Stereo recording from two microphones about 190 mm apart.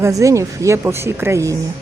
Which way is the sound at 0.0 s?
15° right (ahead or behind).